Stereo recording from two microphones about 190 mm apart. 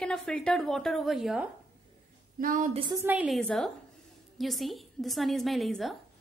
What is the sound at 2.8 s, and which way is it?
Speech, 20° right (ahead or behind).